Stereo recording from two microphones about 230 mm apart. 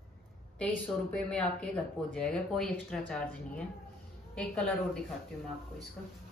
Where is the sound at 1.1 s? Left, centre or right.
Centre.